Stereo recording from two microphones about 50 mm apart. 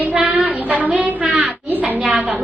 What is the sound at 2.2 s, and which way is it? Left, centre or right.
Speech, centre.